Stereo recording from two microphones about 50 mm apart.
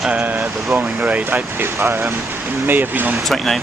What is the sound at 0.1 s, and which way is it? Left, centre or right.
Speech, right.